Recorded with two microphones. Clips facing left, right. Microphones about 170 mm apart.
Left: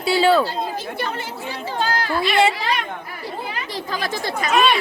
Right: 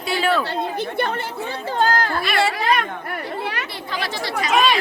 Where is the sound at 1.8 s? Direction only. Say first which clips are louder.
Right 2 dB; 50° right (ahead or behind).